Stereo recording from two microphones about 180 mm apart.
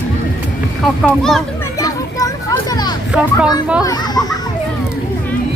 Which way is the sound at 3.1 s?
5° right (ahead or behind).